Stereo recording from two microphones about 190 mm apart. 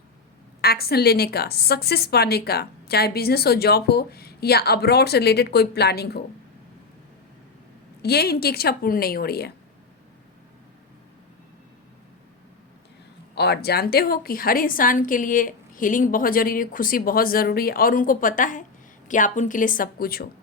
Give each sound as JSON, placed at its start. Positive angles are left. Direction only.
{"t": 0.6, "sound": "a woman's voice", "side_deg": 55}
{"t": 8.0, "sound": "a woman's voice", "side_deg": 55}
{"t": 13.3, "sound": "a woman's voice", "side_deg": 60}